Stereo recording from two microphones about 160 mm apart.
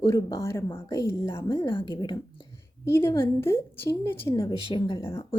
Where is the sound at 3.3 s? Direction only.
15° left (ahead or behind).